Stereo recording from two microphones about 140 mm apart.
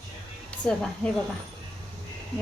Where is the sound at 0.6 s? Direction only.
5° left (ahead or behind).